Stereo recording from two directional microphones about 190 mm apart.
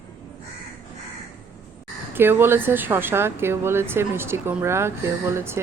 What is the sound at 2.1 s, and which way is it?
Speech, 10° right (ahead or behind).